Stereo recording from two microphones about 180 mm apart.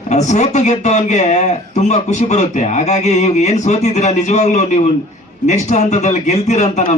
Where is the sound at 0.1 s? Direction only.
40° left (ahead or behind).